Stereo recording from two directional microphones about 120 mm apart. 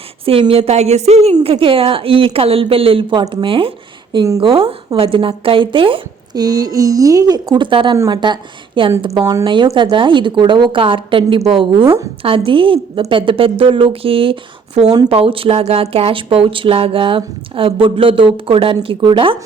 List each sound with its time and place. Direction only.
0.3 s a woman's voice: 50° right (ahead or behind)
4.1 s speech: 35° right (ahead or behind)
4.4 s speech: 50° right (ahead or behind)
6.3 s speech: 30° right (ahead or behind); by 19.4 s 50° right (ahead or behind)